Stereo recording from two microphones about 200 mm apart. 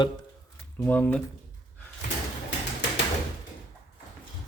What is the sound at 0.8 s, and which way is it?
Speech, 5° left (ahead or behind).